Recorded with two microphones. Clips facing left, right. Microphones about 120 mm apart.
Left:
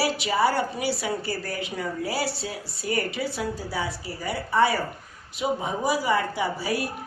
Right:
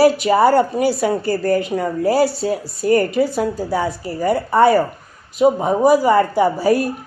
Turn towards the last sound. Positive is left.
turn(degrees=-45)  # may be behind; listen again after turning